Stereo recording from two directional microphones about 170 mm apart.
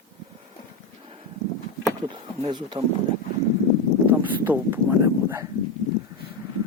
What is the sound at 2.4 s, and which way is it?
Speech, 25° right (ahead or behind).